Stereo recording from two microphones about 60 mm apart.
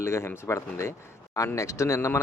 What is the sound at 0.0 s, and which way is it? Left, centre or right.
Speech, left.